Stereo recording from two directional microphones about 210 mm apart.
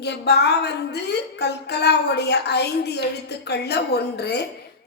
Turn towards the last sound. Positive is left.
turn(degrees=55)  # may be behind; listen again after turning